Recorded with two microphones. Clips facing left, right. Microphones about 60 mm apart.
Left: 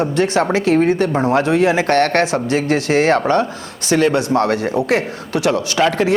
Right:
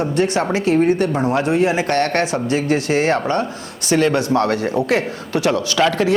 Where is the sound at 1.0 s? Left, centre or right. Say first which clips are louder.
Left 2 dB; left.